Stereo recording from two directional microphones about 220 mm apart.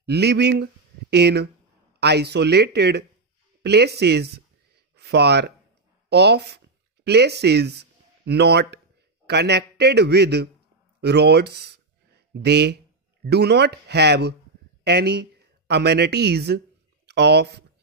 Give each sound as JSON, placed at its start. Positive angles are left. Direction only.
{"t": 0.0, "sound": "a man's voice", "side_deg": -50}